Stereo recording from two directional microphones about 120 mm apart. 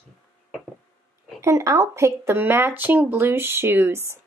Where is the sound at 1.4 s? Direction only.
25° right (ahead or behind).